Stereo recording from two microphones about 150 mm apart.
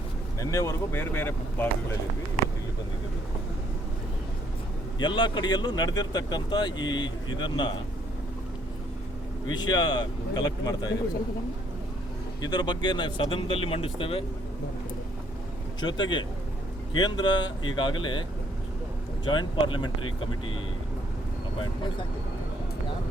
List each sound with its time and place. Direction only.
0.3 s speech: 20° left (ahead or behind)
4.9 s speech: 30° left (ahead or behind)
9.5 s speech: 30° left (ahead or behind)
12.4 s speech: 30° left (ahead or behind)
15.8 s speech: 30° left (ahead or behind)